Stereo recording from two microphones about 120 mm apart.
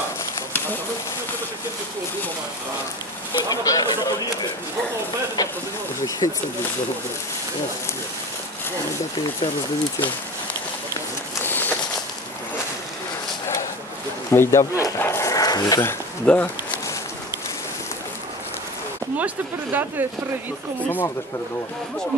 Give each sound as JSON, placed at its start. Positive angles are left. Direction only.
{"t": 3.3, "sound": "speech", "side_deg": 30}
{"t": 11.4, "sound": "a sound", "side_deg": 15}
{"t": 14.3, "sound": "dog", "side_deg": 20}
{"t": 15.8, "sound": "speech", "side_deg": 15}
{"t": 19.1, "sound": "speech", "side_deg": -15}